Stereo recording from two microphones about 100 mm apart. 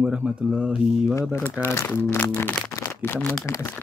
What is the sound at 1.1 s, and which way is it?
Speech, 25° left (ahead or behind).